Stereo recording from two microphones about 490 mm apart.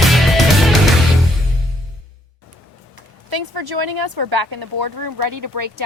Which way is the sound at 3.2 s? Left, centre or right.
Right.